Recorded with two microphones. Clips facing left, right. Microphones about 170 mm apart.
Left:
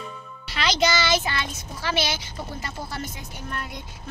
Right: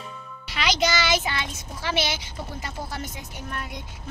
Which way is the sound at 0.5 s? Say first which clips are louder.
Left 1 dB; 15° right (ahead or behind).